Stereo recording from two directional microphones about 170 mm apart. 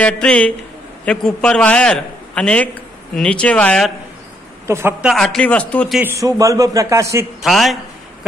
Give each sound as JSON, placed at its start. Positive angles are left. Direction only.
{"t": 0.0, "sound": "a man's voice", "side_deg": 5}
{"t": 4.6, "sound": "a woman's voice", "side_deg": -15}
{"t": 5.0, "sound": "a man's voice", "side_deg": 0}
{"t": 5.9, "sound": "a man's voice", "side_deg": -15}
{"t": 7.4, "sound": "a sound", "side_deg": 0}